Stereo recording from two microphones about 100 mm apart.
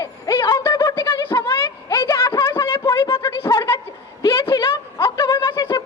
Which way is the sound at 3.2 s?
25° left (ahead or behind).